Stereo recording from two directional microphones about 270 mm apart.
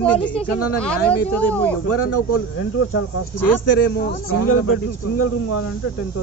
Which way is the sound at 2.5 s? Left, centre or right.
Left.